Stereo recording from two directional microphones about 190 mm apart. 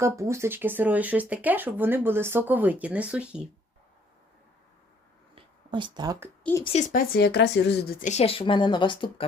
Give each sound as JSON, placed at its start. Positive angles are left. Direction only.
{"t": 0.0, "sound": "speech", "side_deg": -15}
{"t": 5.3, "sound": "a sound", "side_deg": -25}
{"t": 6.4, "sound": "a woman's voice", "side_deg": 15}
{"t": 6.7, "sound": "speech", "side_deg": 40}
{"t": 8.0, "sound": "speech", "side_deg": 35}